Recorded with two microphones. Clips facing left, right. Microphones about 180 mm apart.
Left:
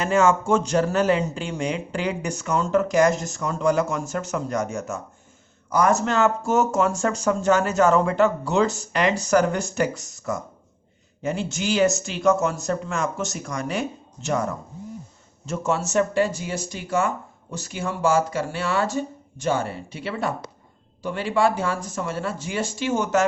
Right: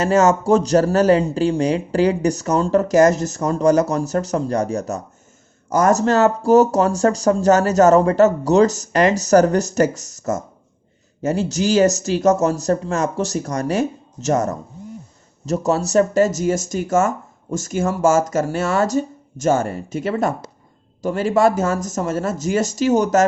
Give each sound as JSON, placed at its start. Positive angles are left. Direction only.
{"t": 0.0, "sound": "speech", "side_deg": -40}